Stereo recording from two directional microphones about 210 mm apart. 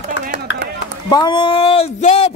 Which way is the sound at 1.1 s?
20° left (ahead or behind).